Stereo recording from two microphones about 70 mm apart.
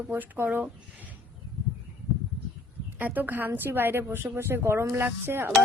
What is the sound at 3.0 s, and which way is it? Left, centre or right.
Speech, right.